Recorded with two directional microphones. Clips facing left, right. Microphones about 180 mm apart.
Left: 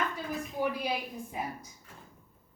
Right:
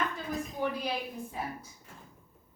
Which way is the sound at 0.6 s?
10° left (ahead or behind).